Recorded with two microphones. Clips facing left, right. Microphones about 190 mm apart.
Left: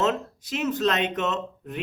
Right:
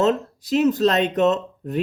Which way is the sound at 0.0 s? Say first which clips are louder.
Right 5 dB; 35° right (ahead or behind).